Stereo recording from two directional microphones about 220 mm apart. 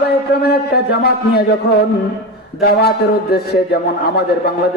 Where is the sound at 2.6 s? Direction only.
45° left (ahead or behind).